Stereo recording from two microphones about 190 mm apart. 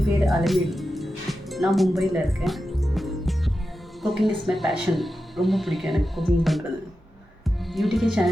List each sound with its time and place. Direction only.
0.3 s music: centre (ahead or behind)
4.0 s a woman's voice: centre (ahead or behind)